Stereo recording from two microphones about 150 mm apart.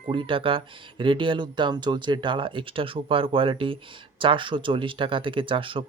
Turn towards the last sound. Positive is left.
turn(degrees=-35)  # may be behind; listen again after turning